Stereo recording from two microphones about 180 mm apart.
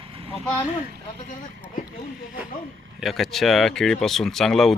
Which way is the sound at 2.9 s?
Centre (ahead or behind).